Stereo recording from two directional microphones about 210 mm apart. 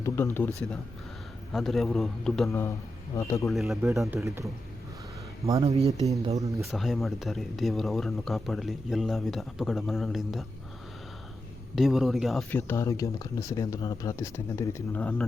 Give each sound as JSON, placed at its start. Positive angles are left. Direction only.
{"t": 0.3, "sound": "speech", "side_deg": 10}
{"t": 2.5, "sound": "speech", "side_deg": 15}
{"t": 3.5, "sound": "speech", "side_deg": 0}
{"t": 5.5, "sound": "speech", "side_deg": -25}
{"t": 6.7, "sound": "speech", "side_deg": 0}
{"t": 11.7, "sound": "speech", "side_deg": 0}